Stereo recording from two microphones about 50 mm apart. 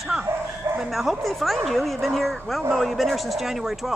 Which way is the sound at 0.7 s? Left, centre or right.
Centre.